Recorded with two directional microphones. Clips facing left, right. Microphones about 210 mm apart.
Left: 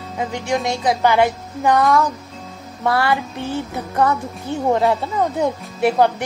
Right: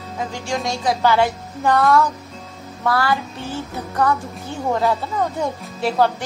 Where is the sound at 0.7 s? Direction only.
20° left (ahead or behind).